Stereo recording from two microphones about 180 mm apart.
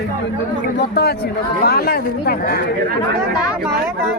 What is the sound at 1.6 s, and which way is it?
A woman's voice, 60° left (ahead or behind).